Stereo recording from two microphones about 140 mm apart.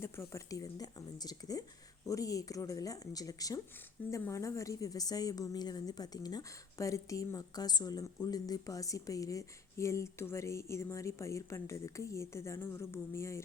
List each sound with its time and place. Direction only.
0.0 s a woman's voice: 20° left (ahead or behind)